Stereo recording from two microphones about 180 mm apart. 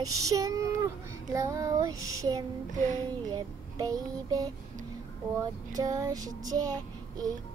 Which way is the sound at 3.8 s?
20° right (ahead or behind).